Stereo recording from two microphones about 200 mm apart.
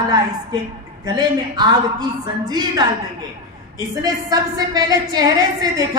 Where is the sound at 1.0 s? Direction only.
20° right (ahead or behind).